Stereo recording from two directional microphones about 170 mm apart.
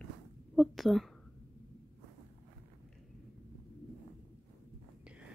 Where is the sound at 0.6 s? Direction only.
Centre (ahead or behind).